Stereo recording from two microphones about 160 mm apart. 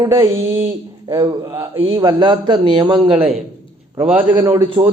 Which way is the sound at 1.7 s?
35° right (ahead or behind).